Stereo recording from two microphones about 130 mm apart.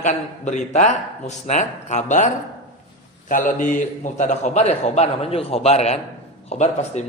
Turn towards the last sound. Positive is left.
turn(degrees=60)  # may be behind; listen again after turning